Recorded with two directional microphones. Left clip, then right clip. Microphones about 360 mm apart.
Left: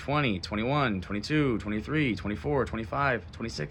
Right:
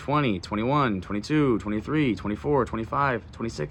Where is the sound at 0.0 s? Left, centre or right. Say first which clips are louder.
Right 3 dB; centre.